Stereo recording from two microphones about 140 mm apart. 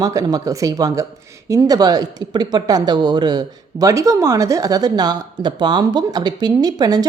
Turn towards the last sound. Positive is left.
turn(degrees=-30)  # may be behind; listen again after turning